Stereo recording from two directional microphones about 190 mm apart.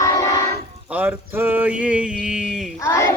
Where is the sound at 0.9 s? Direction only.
10° right (ahead or behind).